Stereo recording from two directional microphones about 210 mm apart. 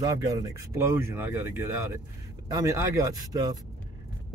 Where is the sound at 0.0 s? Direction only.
15° right (ahead or behind).